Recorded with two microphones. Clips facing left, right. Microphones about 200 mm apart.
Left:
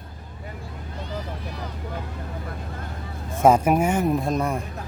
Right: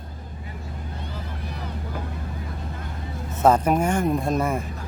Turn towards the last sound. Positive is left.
turn(degrees=0)  # may be behind; listen again after turning